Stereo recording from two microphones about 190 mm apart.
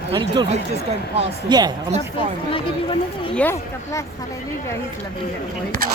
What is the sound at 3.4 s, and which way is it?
Speech, 15° left (ahead or behind).